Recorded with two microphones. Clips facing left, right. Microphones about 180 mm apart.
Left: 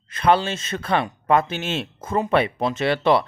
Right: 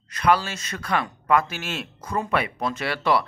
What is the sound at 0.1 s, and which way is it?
Speech, 25° left (ahead or behind).